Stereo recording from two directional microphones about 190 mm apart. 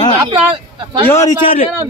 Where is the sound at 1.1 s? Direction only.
20° left (ahead or behind).